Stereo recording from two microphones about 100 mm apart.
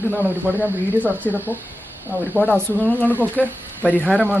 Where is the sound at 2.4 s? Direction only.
15° right (ahead or behind).